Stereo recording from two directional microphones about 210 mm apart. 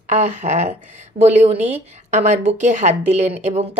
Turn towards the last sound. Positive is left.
turn(degrees=-30)  # may be behind; listen again after turning